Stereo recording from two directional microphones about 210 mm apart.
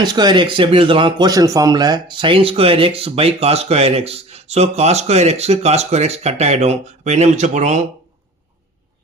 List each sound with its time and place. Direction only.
0.0 s a man's voice: 20° right (ahead or behind)